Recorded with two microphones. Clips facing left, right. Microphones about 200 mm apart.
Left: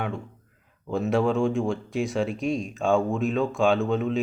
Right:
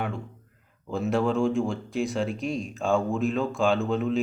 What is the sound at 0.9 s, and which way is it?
Speech, 5° right (ahead or behind).